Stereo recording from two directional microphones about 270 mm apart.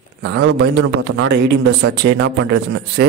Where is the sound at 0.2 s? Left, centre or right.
Right.